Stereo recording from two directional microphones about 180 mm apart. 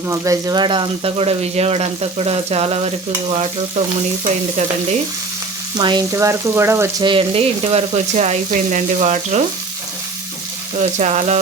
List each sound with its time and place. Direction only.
0.1 s speech: 20° right (ahead or behind); by 4.9 s 40° right (ahead or behind)
5.7 s frying: 25° right (ahead or behind)
7.0 s speech: 30° right (ahead or behind)
11.0 s speech: 40° right (ahead or behind)